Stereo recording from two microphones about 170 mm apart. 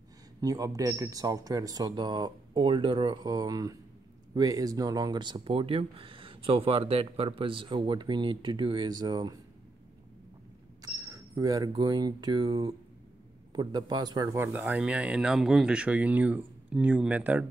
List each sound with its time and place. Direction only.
0.4 s speech: 20° right (ahead or behind)
10.8 s speech: 20° right (ahead or behind)